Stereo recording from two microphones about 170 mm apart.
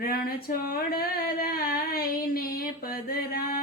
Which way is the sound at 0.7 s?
60° left (ahead or behind).